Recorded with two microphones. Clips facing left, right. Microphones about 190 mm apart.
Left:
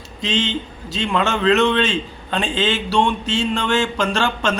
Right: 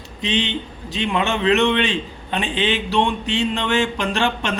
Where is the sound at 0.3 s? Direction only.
20° right (ahead or behind).